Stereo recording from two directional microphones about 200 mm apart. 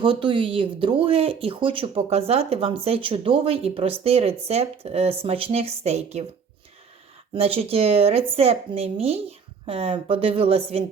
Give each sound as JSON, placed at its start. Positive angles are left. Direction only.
{"t": 0.0, "sound": "a woman's voice", "side_deg": -25}
{"t": 7.3, "sound": "speech", "side_deg": -30}